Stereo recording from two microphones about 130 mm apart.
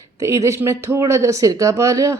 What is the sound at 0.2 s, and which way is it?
Speech, 25° right (ahead or behind).